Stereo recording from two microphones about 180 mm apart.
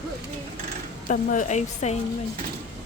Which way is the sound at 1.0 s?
45° left (ahead or behind).